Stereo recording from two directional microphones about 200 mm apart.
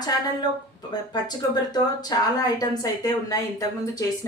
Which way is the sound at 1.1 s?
20° left (ahead or behind).